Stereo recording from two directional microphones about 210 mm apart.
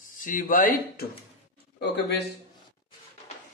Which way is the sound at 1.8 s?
55° left (ahead or behind).